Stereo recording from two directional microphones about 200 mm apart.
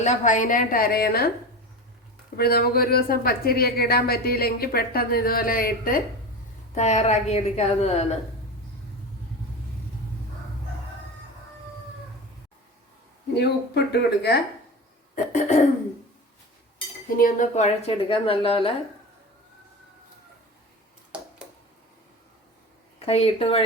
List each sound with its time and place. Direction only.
0.0 s a woman's voice: 35° left (ahead or behind)
2.3 s a woman's voice: 50° left (ahead or behind)
6.7 s a woman's voice: 35° left (ahead or behind)
13.3 s speech: 55° left (ahead or behind)
15.1 s cough: 35° left (ahead or behind)
17.2 s a woman's voice: 40° left (ahead or behind)
23.0 s a woman's voice: 30° left (ahead or behind)